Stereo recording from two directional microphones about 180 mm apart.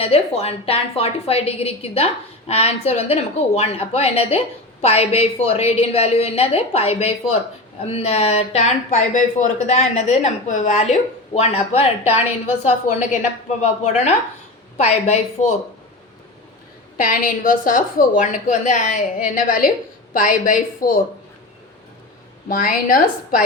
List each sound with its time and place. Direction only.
0.0 s a woman's voice: 35° left (ahead or behind)
17.0 s a woman's voice: 50° left (ahead or behind)
22.4 s a woman's voice: 50° left (ahead or behind)